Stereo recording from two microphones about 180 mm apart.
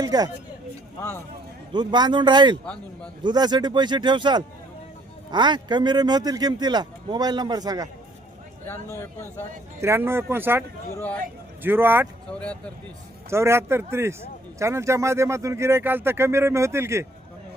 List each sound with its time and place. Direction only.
0.0 s speech: 20° right (ahead or behind)
1.7 s speech: 25° right (ahead or behind)
8.6 s speech: 10° left (ahead or behind)
9.8 s speech: 15° right (ahead or behind)
10.9 s speech: 10° left (ahead or behind)
11.6 s speech: 10° right (ahead or behind)
12.3 s speech: 5° left (ahead or behind)
13.3 s speech: 15° right (ahead or behind)